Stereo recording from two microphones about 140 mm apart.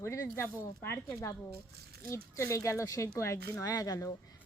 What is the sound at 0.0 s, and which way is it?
A woman's voice, 20° left (ahead or behind).